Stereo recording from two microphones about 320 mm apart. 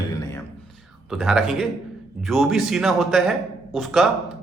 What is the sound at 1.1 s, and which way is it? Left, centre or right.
Speech, centre.